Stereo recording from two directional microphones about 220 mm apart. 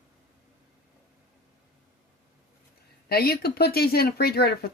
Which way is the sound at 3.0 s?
45° left (ahead or behind).